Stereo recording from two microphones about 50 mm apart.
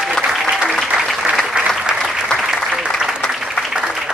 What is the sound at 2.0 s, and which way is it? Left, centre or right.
Applause, centre.